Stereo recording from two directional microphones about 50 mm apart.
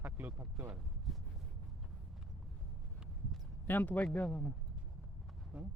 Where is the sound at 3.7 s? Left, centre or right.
Left.